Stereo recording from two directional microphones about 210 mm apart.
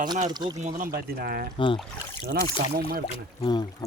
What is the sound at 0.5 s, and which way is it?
Speech, 40° right (ahead or behind).